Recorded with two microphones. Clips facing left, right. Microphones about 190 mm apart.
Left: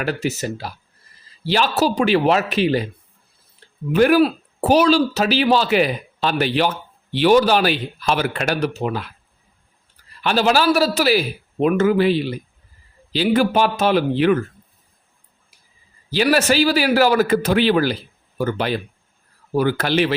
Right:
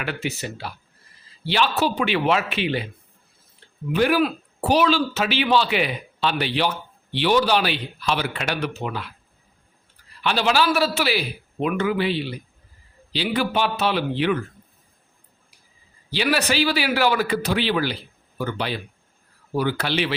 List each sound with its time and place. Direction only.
0.0 s a man's voice: 40° left (ahead or behind)
3.6 s a sound: 40° left (ahead or behind)
3.9 s speech: 45° left (ahead or behind)
10.2 s speech: 45° left (ahead or behind)
16.0 s a man's voice: 45° left (ahead or behind)